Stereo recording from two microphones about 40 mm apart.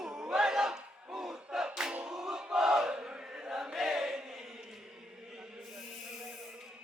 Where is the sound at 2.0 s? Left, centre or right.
Centre.